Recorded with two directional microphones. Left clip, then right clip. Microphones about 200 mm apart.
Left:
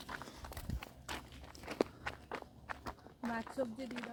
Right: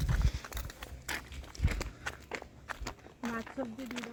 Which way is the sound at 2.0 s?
60° right (ahead or behind).